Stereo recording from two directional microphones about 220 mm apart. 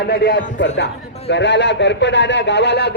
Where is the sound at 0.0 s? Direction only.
45° left (ahead or behind).